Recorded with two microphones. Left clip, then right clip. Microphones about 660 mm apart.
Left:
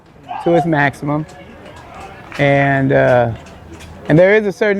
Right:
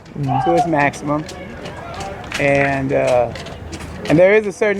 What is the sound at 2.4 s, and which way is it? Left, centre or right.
Speech, left.